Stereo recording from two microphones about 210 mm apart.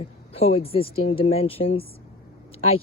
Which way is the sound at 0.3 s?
25° left (ahead or behind).